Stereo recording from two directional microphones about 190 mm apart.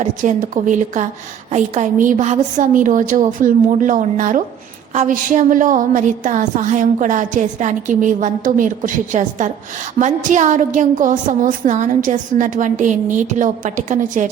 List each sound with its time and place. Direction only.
0.0 s a woman's voice: 40° right (ahead or behind)